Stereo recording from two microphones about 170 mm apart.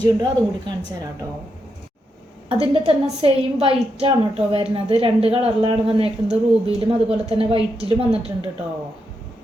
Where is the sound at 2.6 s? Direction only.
35° right (ahead or behind).